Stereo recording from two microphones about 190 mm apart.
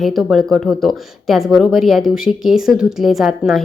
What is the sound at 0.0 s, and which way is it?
Speech, centre (ahead or behind).